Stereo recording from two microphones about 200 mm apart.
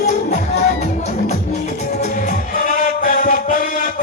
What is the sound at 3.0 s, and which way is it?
Chant, 40° left (ahead or behind).